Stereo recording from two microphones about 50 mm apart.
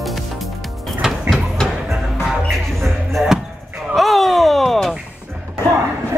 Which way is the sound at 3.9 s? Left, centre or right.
Centre.